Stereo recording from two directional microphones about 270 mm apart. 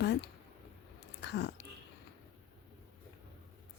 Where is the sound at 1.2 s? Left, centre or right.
Left.